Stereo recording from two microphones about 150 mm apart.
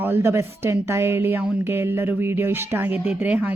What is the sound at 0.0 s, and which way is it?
Speech, 15° right (ahead or behind).